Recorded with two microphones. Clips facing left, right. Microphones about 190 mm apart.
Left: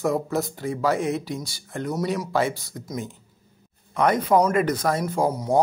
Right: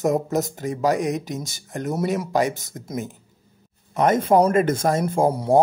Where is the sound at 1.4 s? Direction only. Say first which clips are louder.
Right 2 dB; 45° right (ahead or behind).